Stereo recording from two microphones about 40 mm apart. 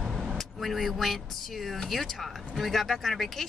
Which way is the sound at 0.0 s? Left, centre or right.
Centre.